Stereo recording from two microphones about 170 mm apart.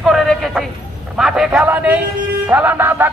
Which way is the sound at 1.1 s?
5° right (ahead or behind).